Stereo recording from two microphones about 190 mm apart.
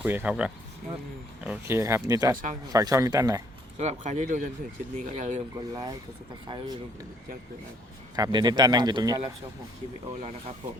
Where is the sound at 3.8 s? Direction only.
40° right (ahead or behind).